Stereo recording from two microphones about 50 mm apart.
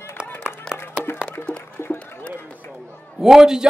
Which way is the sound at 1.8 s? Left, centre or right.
Left.